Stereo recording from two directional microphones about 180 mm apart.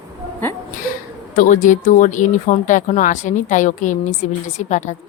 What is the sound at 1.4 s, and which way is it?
A woman's voice, 45° left (ahead or behind).